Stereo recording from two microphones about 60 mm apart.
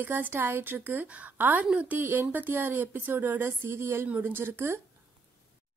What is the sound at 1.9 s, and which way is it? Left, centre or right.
Speech, right.